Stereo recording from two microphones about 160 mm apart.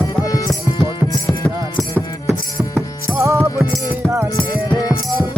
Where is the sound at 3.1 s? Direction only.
20° right (ahead or behind).